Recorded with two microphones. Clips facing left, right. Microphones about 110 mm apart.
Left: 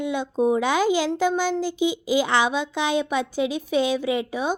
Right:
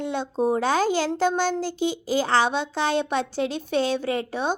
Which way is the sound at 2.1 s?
40° right (ahead or behind).